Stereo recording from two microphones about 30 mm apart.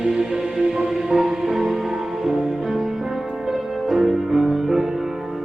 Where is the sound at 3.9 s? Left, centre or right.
Centre.